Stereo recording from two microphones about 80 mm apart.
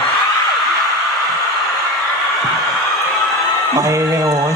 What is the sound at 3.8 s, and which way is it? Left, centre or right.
Speech, right.